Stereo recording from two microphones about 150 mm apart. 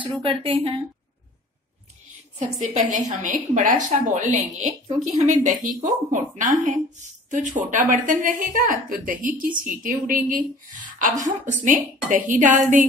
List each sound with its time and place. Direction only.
0.0 s a woman's voice: 35° right (ahead or behind)
2.3 s a woman's voice: 50° right (ahead or behind)